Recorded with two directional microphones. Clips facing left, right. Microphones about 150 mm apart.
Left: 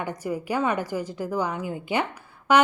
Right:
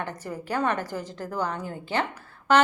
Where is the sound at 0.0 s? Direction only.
10° left (ahead or behind).